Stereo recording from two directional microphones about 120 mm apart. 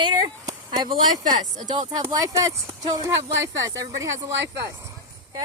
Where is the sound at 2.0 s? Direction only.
25° right (ahead or behind).